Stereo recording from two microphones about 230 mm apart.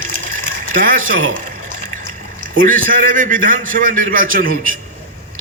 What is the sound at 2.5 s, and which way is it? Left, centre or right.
A man's voice, right.